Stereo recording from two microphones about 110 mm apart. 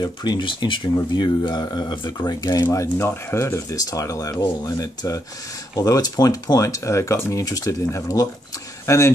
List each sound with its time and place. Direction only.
0.0 s speech: 40° left (ahead or behind); by 9.1 s 25° left (ahead or behind)